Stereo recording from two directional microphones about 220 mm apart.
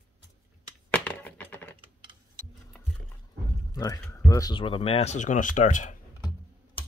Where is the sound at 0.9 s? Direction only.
5° left (ahead or behind).